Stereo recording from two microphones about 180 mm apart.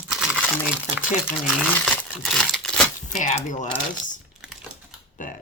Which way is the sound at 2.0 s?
5° left (ahead or behind).